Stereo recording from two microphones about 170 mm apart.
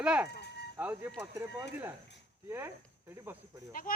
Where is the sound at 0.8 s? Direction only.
10° right (ahead or behind).